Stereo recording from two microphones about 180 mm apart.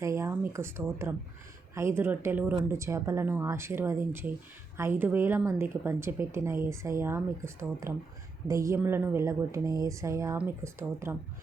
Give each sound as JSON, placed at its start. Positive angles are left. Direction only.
{"t": 0.0, "sound": "a woman's voice", "side_deg": -15}